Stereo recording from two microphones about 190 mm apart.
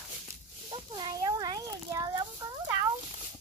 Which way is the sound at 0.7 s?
25° right (ahead or behind).